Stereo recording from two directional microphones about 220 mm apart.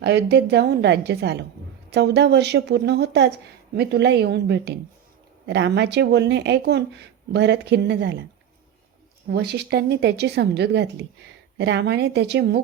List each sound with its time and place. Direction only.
0.0 s speech: 50° right (ahead or behind)
9.3 s speech: 50° right (ahead or behind)